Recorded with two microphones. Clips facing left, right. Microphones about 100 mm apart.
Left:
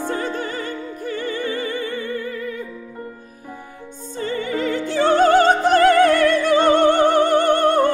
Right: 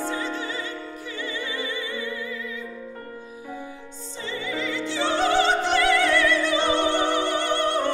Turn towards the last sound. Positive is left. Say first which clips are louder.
# left 8 dB
turn(degrees=45)  # may be behind; listen again after turning